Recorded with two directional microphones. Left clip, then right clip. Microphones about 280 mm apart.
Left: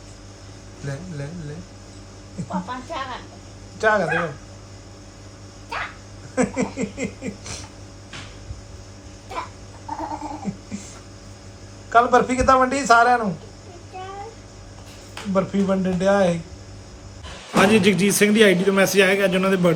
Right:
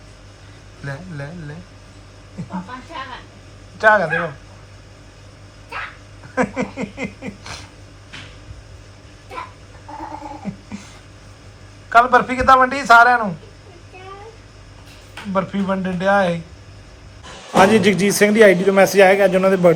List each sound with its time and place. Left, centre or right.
3.8 s a man's voice: centre
6.3 s a man's voice: centre
10.7 s a sound: centre
11.9 s a man's voice: centre
15.1 s a man's voice: centre